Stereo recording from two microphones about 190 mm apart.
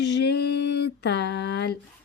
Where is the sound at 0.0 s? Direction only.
65° left (ahead or behind).